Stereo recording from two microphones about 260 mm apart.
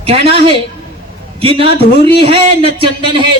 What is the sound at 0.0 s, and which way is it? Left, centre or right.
A man's voice, right.